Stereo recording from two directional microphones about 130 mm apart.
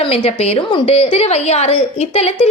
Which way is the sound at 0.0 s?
45° left (ahead or behind).